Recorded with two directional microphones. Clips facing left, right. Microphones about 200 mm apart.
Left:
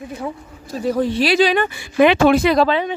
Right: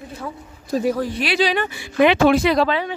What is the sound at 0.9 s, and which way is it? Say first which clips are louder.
Speech: left 5 dB; 25° left (ahead or behind).